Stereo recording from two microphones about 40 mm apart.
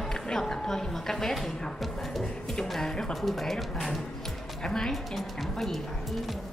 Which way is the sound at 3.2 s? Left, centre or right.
Centre.